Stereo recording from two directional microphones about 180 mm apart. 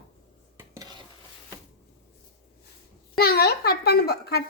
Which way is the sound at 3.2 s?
60° left (ahead or behind).